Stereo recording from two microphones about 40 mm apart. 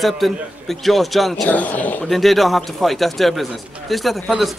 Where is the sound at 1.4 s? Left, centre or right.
Left.